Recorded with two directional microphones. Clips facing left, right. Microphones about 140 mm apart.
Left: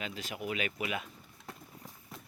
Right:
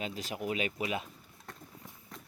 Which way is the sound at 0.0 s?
40° right (ahead or behind).